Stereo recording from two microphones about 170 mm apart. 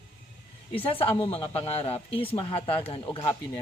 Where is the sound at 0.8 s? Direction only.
30° left (ahead or behind).